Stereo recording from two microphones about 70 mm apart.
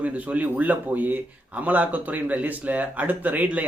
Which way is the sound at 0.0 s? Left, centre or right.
Centre.